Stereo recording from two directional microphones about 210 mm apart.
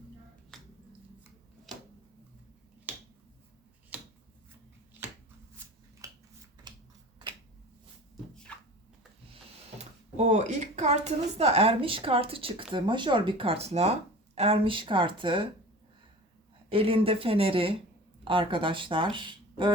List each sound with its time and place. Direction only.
0.5 s finger snapping: centre (ahead or behind)
2.9 s finger snapping: 10° right (ahead or behind)
8.5 s a sound: 5° left (ahead or behind)
9.7 s speech: 35° right (ahead or behind)
16.6 s speech: 25° right (ahead or behind)